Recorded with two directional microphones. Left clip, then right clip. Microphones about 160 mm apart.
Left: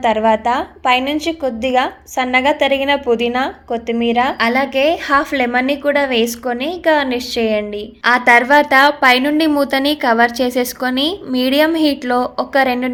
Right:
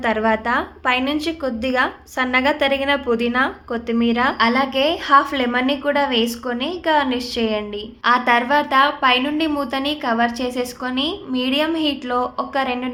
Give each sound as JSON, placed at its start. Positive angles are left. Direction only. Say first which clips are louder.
{"t": 0.0, "sound": "a woman's voice", "louder": "left 5 dB", "side_deg": 20}